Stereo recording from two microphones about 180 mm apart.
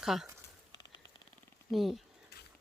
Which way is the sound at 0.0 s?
Centre (ahead or behind).